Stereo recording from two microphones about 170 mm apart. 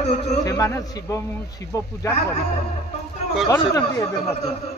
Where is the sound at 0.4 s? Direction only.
20° left (ahead or behind).